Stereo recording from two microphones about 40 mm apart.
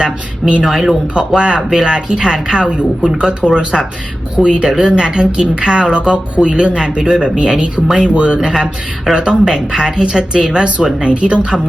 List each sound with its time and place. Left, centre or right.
0.0 s speech: centre
0.7 s speech: centre
1.4 s a woman's voice: right
8.5 s speech: centre
9.1 s a woman's voice: right